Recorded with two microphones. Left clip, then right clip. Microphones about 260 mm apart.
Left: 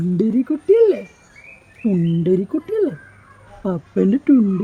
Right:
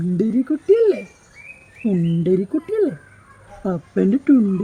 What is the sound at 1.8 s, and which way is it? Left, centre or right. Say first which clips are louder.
Speech: left 1 dB; centre.